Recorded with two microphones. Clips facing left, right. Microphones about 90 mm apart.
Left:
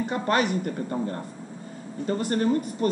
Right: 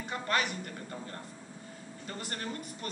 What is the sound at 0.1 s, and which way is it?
Speech, 35° left (ahead or behind).